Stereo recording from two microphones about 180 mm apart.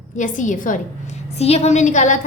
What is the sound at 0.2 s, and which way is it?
A woman's voice, 45° left (ahead or behind).